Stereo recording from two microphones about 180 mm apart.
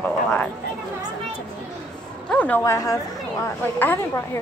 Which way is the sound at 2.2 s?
5° left (ahead or behind).